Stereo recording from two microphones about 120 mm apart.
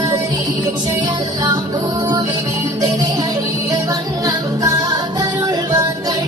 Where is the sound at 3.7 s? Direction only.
30° right (ahead or behind).